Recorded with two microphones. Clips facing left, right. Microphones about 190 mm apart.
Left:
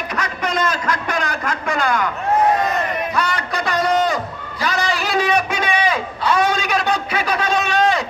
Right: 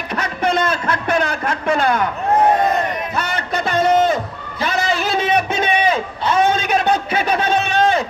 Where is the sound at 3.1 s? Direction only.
25° right (ahead or behind).